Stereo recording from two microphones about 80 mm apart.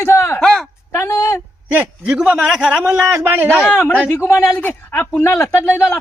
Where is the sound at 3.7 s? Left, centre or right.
Left.